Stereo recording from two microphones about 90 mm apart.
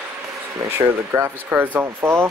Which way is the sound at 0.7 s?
25° right (ahead or behind).